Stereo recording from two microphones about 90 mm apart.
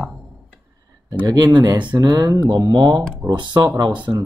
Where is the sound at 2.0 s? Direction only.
45° right (ahead or behind).